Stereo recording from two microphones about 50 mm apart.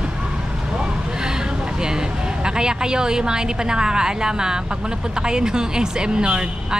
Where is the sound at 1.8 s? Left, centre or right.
Centre.